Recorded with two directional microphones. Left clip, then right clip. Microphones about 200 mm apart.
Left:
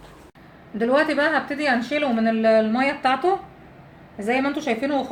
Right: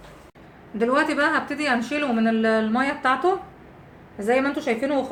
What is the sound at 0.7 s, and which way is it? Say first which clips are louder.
A woman's voice: left 1 dB; 20° left (ahead or behind).